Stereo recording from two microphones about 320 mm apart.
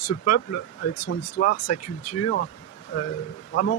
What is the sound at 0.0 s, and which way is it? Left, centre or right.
Speech, left.